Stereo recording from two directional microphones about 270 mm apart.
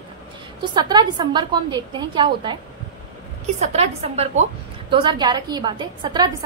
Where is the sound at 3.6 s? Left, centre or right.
Right.